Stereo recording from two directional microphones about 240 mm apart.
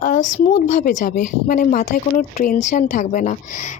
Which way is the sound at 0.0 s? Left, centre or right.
Left.